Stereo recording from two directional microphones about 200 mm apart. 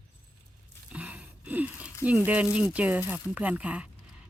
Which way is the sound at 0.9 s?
5° right (ahead or behind).